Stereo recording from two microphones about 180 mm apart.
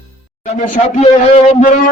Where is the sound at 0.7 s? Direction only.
35° left (ahead or behind).